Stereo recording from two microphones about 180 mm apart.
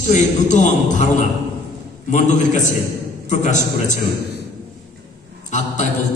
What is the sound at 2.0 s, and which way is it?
A man's voice, 40° left (ahead or behind).